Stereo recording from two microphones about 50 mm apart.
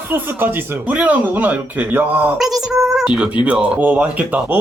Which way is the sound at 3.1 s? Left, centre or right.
Right.